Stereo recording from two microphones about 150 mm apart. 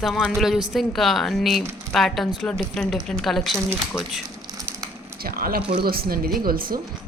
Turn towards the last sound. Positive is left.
turn(degrees=-75)  # may be behind; listen again after turning